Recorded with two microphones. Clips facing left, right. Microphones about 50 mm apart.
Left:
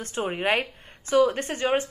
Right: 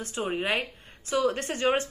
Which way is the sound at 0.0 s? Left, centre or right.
Left.